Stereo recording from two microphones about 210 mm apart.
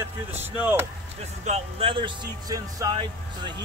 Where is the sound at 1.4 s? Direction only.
30° right (ahead or behind).